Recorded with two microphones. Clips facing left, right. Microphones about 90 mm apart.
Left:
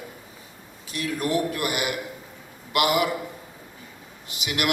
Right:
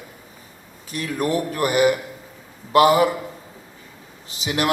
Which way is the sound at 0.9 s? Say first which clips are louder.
Right 2 dB; 40° right (ahead or behind).